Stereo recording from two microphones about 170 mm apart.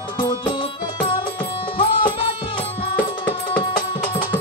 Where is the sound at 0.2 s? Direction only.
25° left (ahead or behind).